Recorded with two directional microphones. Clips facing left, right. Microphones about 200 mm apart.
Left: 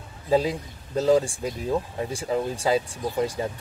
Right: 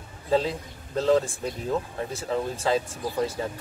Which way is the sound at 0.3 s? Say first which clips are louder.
Left 2 dB; 10° left (ahead or behind).